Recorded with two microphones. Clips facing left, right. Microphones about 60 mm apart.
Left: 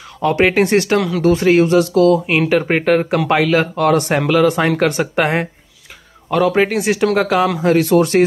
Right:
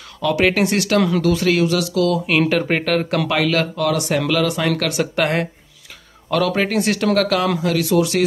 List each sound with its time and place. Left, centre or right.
0.2 s speech: left
0.9 s speech: centre
1.2 s speech: left
2.5 s speech: centre
3.7 s speech: left
4.3 s speech: left
7.5 s speech: left